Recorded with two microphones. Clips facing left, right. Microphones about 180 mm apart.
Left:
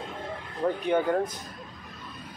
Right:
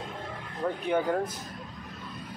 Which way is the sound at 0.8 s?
5° right (ahead or behind).